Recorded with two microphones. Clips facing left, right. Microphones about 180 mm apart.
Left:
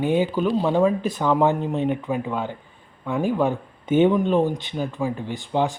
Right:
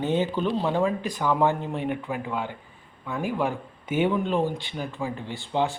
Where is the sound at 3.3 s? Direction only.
25° left (ahead or behind).